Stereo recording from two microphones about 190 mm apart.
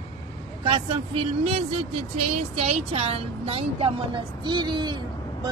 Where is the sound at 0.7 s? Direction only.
30° right (ahead or behind).